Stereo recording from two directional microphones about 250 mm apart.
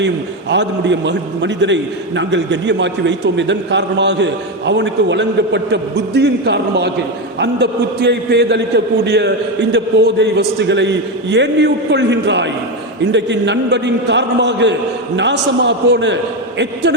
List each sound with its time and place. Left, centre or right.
0.5 s a man's voice: right